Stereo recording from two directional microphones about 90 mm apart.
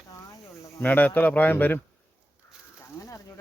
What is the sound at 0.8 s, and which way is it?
A man's voice, 20° left (ahead or behind).